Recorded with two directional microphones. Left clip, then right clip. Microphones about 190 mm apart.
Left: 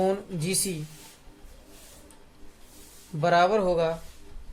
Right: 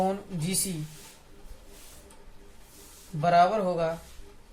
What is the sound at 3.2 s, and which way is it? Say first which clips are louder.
Speech: even; 45° left (ahead or behind).